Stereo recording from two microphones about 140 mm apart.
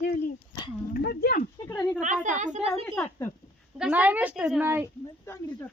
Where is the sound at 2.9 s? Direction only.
10° left (ahead or behind).